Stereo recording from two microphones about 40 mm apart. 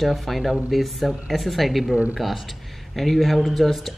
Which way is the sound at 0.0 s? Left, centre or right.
Centre.